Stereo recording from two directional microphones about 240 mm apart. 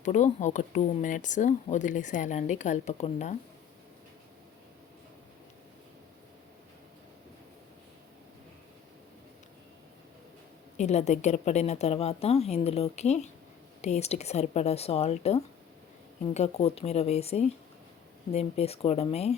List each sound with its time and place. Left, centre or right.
0.0 s speech: left
10.8 s a woman's voice: left